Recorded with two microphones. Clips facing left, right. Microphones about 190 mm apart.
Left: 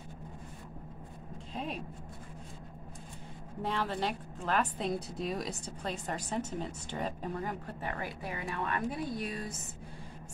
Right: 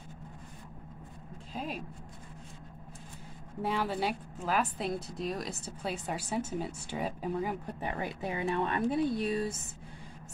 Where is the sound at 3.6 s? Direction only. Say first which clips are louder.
Right 2 dB; 10° right (ahead or behind); by 9.5 s 30° right (ahead or behind).